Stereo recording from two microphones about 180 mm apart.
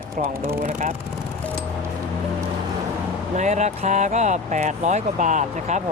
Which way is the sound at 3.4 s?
40° right (ahead or behind).